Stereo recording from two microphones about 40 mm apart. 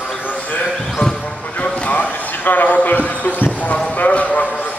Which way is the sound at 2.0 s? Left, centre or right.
Left.